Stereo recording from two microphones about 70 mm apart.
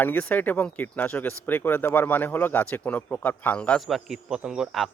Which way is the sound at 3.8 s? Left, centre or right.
Centre.